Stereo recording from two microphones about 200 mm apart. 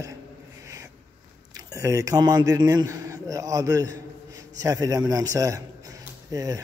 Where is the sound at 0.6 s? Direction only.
15° right (ahead or behind).